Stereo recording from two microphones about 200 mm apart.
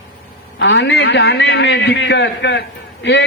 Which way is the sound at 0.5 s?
60° left (ahead or behind).